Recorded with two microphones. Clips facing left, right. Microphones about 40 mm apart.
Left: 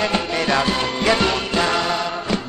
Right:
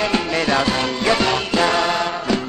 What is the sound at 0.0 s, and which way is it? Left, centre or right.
Music, centre.